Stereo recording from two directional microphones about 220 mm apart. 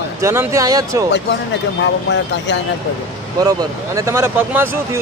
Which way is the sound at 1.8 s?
55° left (ahead or behind).